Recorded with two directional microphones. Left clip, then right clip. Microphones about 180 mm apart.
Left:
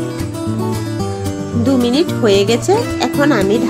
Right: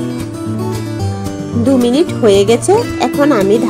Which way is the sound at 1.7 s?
10° right (ahead or behind).